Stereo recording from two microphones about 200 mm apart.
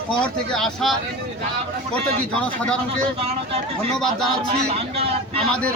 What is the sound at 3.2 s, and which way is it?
Speech, 30° right (ahead or behind).